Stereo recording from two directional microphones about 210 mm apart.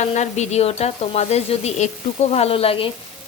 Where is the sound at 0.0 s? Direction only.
35° left (ahead or behind).